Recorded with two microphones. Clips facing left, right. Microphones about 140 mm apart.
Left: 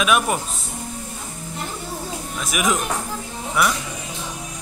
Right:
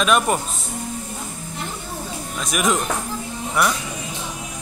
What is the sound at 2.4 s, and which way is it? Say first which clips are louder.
Speech: right 1 dB; centre (ahead or behind).